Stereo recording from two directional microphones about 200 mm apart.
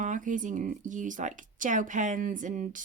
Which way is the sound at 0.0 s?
40° right (ahead or behind).